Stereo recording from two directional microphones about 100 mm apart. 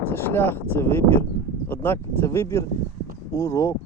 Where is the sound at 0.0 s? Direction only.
20° left (ahead or behind).